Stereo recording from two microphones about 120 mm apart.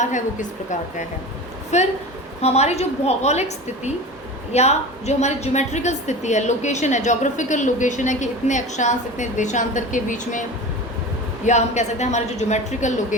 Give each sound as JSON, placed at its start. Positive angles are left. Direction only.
{"t": 0.0, "sound": "a woman's voice", "side_deg": 90}
{"t": 1.7, "sound": "a woman's voice", "side_deg": 70}
{"t": 11.4, "sound": "a woman's voice", "side_deg": 75}